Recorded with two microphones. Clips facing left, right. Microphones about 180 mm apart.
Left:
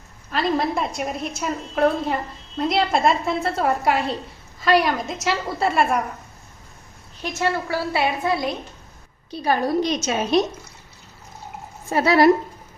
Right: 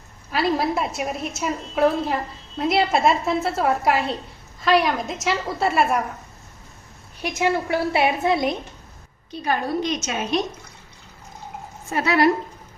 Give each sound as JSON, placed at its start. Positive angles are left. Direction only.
{"t": 0.3, "sound": "a woman's voice", "side_deg": -5}
{"t": 7.2, "sound": "a woman's voice", "side_deg": -15}
{"t": 9.3, "sound": "a woman's voice", "side_deg": 35}
{"t": 11.9, "sound": "a woman's voice", "side_deg": 35}